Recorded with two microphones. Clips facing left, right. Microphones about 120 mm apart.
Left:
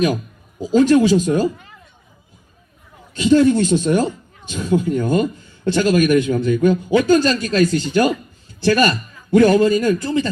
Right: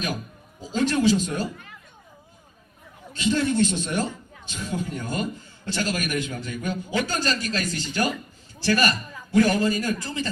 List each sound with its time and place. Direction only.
0.7 s a man's voice: 50° left (ahead or behind)
3.2 s a man's voice: 50° left (ahead or behind)